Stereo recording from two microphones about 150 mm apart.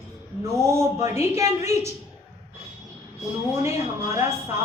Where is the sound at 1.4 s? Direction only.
20° right (ahead or behind).